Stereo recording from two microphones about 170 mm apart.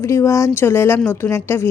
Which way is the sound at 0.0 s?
15° left (ahead or behind).